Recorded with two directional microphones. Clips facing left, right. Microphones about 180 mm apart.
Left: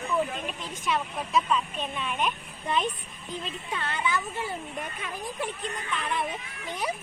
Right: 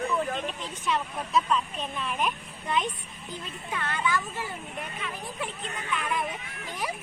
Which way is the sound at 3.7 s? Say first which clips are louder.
Right 1 dB; 25° left (ahead or behind).